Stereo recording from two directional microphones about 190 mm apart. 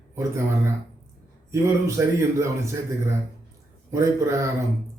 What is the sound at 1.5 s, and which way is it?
A man's voice, 15° right (ahead or behind).